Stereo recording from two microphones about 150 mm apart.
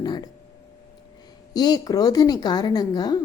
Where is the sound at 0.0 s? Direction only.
30° left (ahead or behind).